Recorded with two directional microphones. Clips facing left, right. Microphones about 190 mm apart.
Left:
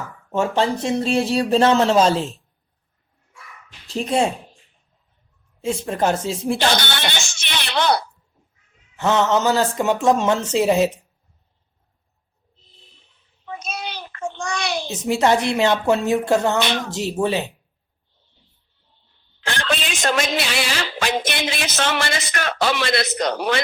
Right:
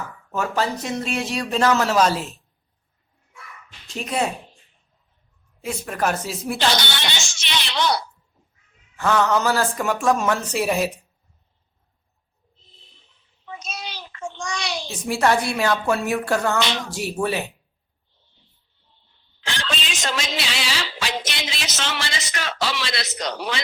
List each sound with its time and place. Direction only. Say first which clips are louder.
0.3 s speech: left 4 dB; 25° left (ahead or behind)
3.8 s speech: left 5 dB; 30° left (ahead or behind)
5.6 s speech: left 4 dB; 25° left (ahead or behind)
6.7 s speech: left 2 dB; 55° left (ahead or behind)
9.0 s speech: left 2 dB; 20° left (ahead or behind)
13.4 s child singing: left 4 dB; 55° left (ahead or behind)
14.8 s speech: left 2 dB; 20° left (ahead or behind)
16.6 s speech: left 2 dB; 55° left (ahead or behind)
16.9 s speech: left 3 dB; 20° left (ahead or behind)
19.5 s a woman's voice: left 5 dB; 55° left (ahead or behind)